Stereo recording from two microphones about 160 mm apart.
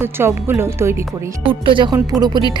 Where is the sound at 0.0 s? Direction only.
15° right (ahead or behind).